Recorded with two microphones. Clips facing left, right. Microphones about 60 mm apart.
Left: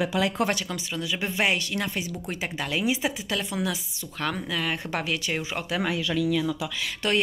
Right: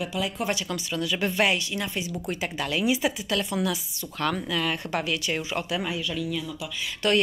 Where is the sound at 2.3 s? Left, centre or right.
Left.